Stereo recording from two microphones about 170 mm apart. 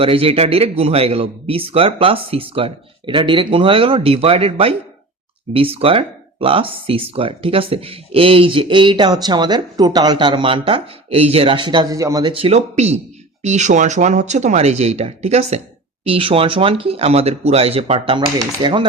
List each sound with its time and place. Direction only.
0.0 s speech: 35° right (ahead or behind)
12.3 s speech: 35° right (ahead or behind)
18.6 s typewriter: 30° right (ahead or behind)